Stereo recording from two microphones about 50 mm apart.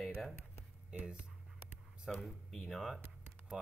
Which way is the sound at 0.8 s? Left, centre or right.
Right.